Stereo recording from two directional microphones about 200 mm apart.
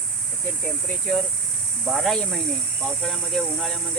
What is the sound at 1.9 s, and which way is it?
Speech, centre (ahead or behind).